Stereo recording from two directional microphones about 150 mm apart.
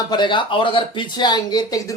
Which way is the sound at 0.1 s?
30° left (ahead or behind).